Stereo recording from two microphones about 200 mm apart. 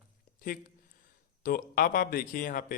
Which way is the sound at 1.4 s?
45° left (ahead or behind).